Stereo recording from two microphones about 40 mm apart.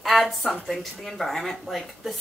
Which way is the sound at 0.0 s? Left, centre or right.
Centre.